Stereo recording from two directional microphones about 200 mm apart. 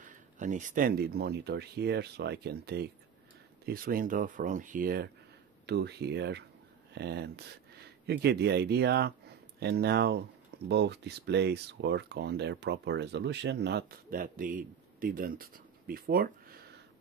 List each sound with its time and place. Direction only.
0.0 s speech: 40° right (ahead or behind)